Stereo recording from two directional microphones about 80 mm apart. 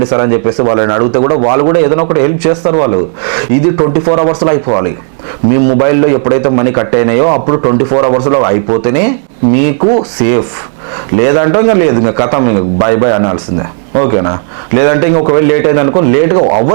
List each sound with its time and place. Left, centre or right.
0.0 s speech: centre
11.2 s speech: centre